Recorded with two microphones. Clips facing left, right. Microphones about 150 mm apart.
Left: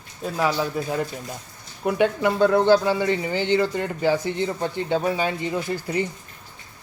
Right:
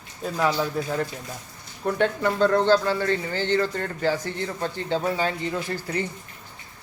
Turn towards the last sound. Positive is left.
turn(degrees=15)  # may be behind; listen again after turning